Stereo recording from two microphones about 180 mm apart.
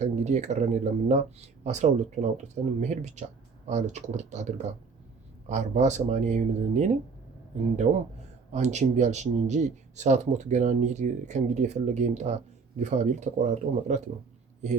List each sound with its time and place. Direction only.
0.0 s speech: 40° right (ahead or behind)